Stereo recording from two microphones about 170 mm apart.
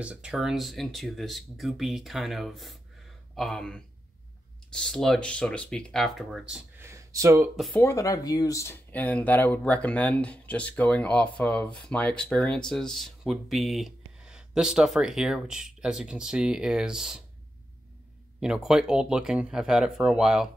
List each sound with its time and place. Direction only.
0.0 s speech: 5° right (ahead or behind)
6.8 s a sound: 15° right (ahead or behind)
7.5 s speech: centre (ahead or behind)
7.8 s speech: 20° left (ahead or behind); by 17.2 s 5° right (ahead or behind)
18.4 s speech: 5° right (ahead or behind)